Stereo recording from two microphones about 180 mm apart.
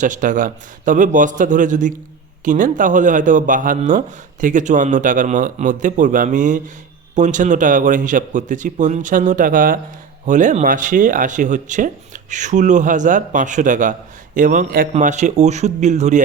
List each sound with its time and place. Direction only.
0.0 s a man's voice: 45° right (ahead or behind)